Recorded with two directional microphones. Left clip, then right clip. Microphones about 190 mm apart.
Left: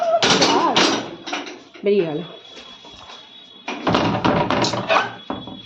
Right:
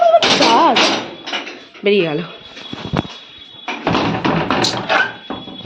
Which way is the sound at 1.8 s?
Centre (ahead or behind).